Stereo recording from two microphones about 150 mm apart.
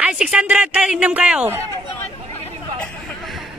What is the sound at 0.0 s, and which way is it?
Speech, 5° right (ahead or behind).